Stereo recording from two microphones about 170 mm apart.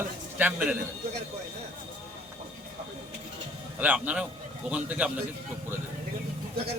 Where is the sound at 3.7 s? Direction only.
10° right (ahead or behind).